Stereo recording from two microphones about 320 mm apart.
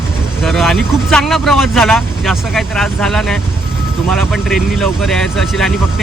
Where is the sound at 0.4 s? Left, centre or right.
Centre.